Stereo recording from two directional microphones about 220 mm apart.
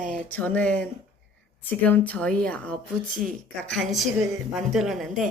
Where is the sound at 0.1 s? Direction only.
5° left (ahead or behind).